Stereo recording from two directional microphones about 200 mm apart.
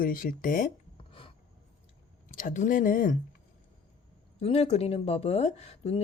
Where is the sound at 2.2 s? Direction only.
40° left (ahead or behind).